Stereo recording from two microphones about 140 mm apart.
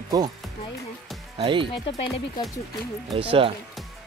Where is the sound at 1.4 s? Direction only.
35° right (ahead or behind).